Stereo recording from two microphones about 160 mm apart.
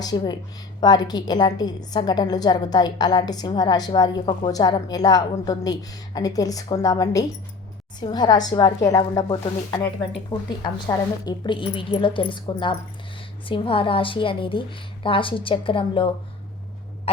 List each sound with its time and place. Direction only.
0.0 s a woman's voice: 25° left (ahead or behind)